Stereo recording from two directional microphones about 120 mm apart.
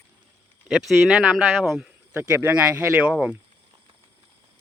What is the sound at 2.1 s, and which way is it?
Speech, 15° right (ahead or behind).